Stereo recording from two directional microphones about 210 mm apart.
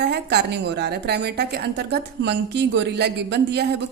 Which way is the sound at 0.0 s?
50° right (ahead or behind).